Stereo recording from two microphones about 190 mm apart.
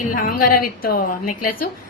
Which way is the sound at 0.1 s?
45° left (ahead or behind).